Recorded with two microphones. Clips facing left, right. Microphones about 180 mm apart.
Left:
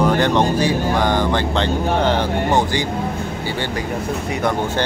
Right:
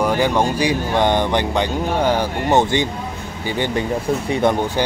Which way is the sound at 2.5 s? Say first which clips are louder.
Right 5 dB; 20° right (ahead or behind).